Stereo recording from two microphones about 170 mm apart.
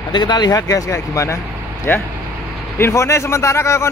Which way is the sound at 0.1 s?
25° left (ahead or behind).